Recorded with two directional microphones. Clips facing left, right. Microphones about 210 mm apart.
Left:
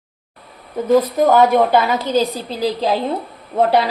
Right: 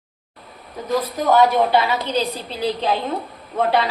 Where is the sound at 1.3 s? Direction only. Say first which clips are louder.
Left 1 dB; 45° left (ahead or behind).